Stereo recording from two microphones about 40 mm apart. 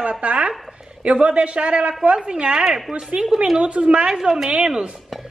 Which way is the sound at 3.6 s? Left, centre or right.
Right.